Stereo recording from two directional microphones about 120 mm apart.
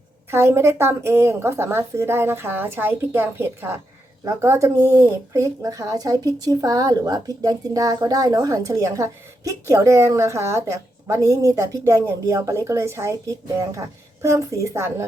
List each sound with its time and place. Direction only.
0.3 s speech: 20° right (ahead or behind)